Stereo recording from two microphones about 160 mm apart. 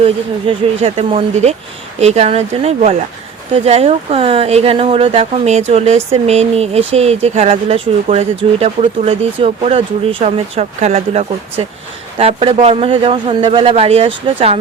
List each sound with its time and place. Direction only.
0.0 s speech: 40° right (ahead or behind)